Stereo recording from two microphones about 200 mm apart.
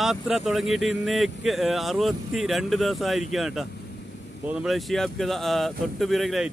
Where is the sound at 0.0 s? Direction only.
Centre (ahead or behind).